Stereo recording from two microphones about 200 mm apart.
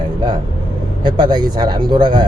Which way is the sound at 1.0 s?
20° right (ahead or behind).